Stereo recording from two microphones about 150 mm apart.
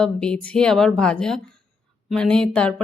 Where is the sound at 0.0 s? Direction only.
5° left (ahead or behind).